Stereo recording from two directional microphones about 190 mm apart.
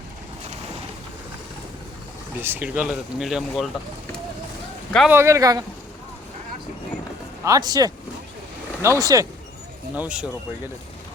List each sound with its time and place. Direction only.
2.4 s speech: 10° right (ahead or behind)
4.9 s speech: centre (ahead or behind)
5.1 s speech: 15° right (ahead or behind)
7.4 s speech: 20° right (ahead or behind)
9.9 s speech: 5° right (ahead or behind)